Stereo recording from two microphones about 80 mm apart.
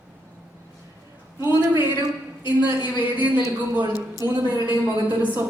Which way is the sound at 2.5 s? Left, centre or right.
Right.